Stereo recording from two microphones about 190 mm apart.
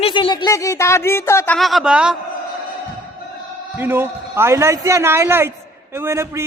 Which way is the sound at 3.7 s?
10° right (ahead or behind).